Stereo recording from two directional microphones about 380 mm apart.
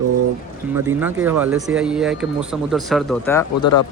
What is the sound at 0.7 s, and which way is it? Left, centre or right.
Speech, centre.